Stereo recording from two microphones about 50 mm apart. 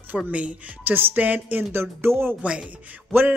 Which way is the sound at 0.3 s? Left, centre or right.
Right.